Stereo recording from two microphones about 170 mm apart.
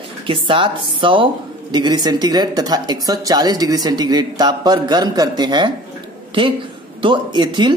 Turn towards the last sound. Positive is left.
turn(degrees=-25)  # may be behind; listen again after turning